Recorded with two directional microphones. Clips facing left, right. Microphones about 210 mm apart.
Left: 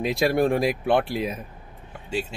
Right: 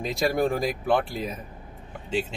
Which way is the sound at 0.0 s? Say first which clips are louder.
Left 3 dB; centre (ahead or behind).